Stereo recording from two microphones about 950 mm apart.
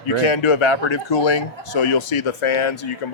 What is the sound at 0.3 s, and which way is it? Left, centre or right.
Speech, left.